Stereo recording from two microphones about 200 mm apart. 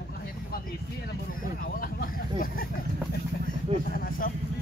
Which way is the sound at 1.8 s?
45° left (ahead or behind).